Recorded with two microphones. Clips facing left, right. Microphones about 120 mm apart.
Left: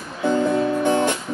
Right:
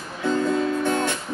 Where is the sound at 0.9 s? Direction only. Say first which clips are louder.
Left 4 dB; 20° left (ahead or behind).